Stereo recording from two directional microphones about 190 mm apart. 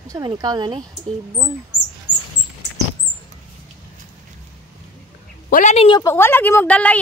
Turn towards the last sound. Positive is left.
turn(degrees=5)  # may be behind; listen again after turning